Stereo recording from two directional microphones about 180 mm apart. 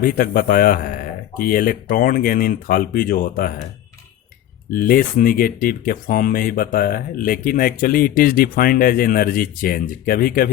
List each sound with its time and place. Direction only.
0.0 s speech: 50° left (ahead or behind)
4.7 s speech: 50° left (ahead or behind)